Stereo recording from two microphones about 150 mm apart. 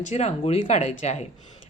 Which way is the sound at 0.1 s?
50° left (ahead or behind).